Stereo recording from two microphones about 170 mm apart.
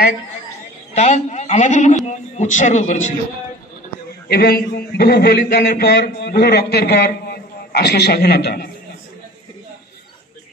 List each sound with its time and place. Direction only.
0.9 s a man's voice: 40° left (ahead or behind)
4.3 s a man's voice: 70° left (ahead or behind)